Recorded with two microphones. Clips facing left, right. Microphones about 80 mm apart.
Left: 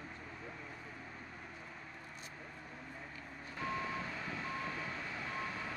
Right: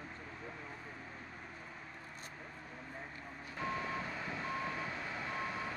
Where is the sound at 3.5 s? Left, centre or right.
Centre.